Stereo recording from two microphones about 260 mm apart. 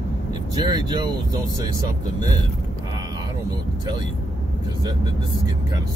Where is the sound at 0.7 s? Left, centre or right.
Centre.